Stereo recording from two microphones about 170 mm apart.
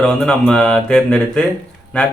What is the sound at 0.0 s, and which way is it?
Speech, 5° left (ahead or behind).